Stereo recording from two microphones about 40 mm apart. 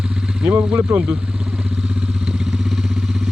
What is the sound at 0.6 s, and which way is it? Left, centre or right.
Speech, right.